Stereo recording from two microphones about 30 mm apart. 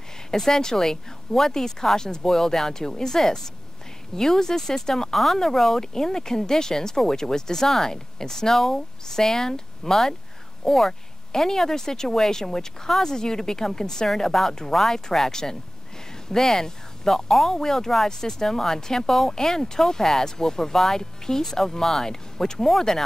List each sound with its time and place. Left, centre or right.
0.3 s speech: centre